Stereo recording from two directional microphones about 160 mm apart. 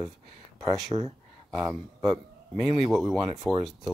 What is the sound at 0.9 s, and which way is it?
Speech, 25° right (ahead or behind).